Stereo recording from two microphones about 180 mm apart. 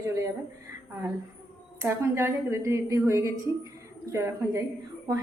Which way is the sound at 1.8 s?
15° right (ahead or behind).